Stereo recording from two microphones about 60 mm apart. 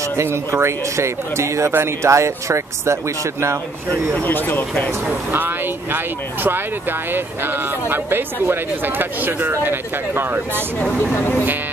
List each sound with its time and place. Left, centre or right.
0.2 s speech: right
1.7 s speech: right
4.2 s speech: left
5.3 s speech: right
11.0 s speech: left